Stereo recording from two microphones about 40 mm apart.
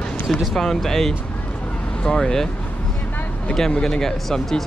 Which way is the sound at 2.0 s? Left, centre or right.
Left.